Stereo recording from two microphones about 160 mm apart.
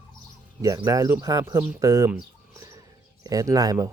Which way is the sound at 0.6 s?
20° right (ahead or behind).